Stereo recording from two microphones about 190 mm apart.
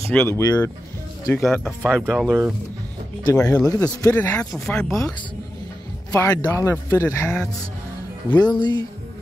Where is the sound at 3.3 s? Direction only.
15° left (ahead or behind).